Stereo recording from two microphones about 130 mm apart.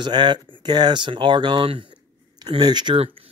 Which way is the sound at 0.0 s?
35° right (ahead or behind).